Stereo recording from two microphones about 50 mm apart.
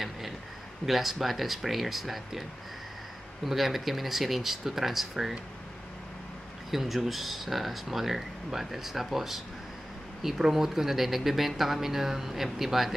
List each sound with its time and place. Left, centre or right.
0.8 s speech: centre
3.4 s speech: centre
6.7 s speech: centre